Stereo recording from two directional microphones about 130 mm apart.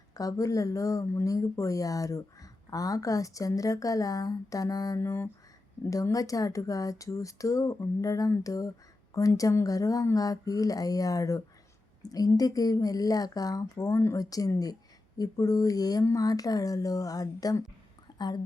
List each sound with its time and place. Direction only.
0.1 s speech: 25° left (ahead or behind)
18.1 s whispering: 35° left (ahead or behind)